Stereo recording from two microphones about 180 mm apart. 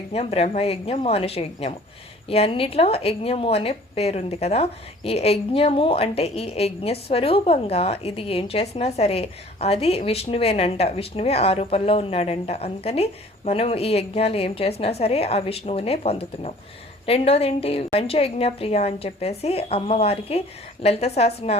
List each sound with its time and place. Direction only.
0.1 s a woman's voice: 35° left (ahead or behind)